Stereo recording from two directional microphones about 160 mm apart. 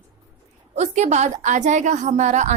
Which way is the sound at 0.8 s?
45° right (ahead or behind).